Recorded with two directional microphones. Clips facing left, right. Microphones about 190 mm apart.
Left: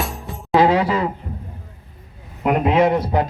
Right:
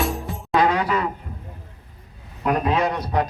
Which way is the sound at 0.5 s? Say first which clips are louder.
Left 4 dB; 25° left (ahead or behind).